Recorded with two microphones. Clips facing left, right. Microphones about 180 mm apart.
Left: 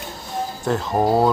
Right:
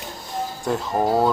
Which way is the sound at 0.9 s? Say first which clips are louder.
Left 2 dB; 10° left (ahead or behind).